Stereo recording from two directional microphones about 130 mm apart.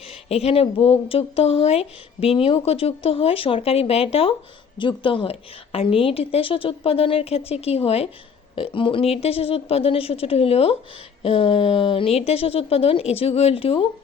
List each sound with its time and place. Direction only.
0.1 s speech: 50° left (ahead or behind)